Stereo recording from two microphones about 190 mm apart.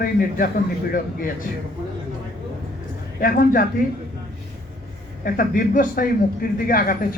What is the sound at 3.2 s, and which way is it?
Speech, 50° left (ahead or behind).